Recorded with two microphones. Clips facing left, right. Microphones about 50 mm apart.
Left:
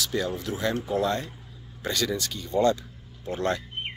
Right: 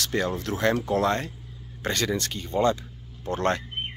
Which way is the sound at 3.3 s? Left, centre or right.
Right.